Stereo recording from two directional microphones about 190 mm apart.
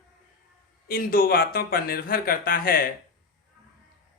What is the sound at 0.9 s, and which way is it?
Speech, 50° left (ahead or behind).